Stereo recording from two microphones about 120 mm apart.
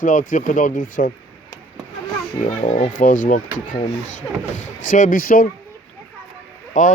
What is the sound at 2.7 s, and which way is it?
Speech, 90° left.